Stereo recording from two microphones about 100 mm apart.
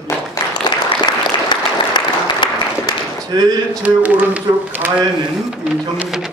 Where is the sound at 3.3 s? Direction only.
40° right (ahead or behind).